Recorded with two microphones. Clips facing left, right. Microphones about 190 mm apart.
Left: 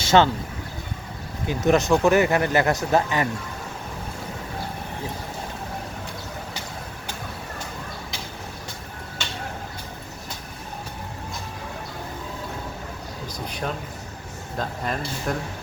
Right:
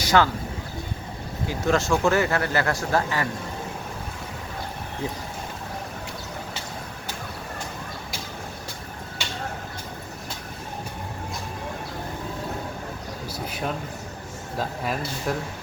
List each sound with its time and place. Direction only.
0.0 s a sound: 25° left (ahead or behind)
1.5 s speech: 20° left (ahead or behind)
14.6 s speech: 5° right (ahead or behind)